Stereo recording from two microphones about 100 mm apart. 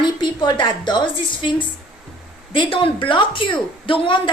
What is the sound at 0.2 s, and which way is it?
A woman's voice, 50° left (ahead or behind).